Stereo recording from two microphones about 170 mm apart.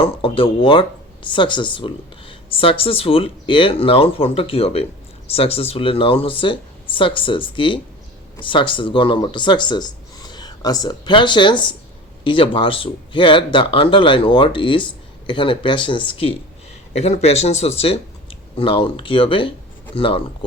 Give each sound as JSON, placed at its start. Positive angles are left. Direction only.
{"t": 0.0, "sound": "speech", "side_deg": 30}